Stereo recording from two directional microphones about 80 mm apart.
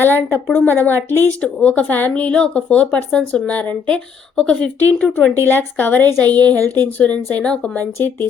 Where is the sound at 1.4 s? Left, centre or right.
Centre.